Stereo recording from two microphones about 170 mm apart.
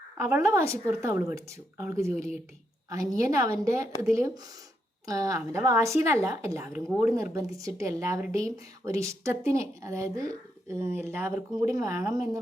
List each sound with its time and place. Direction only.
0.2 s a woman's voice: 15° right (ahead or behind)
5.0 s a woman's voice: 20° right (ahead or behind)